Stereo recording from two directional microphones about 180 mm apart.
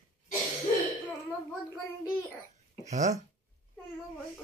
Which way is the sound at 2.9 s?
40° right (ahead or behind).